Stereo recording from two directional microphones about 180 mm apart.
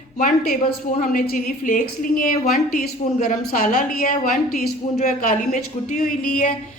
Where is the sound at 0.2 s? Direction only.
50° left (ahead or behind).